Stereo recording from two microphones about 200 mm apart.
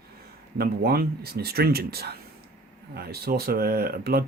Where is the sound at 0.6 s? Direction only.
50° right (ahead or behind).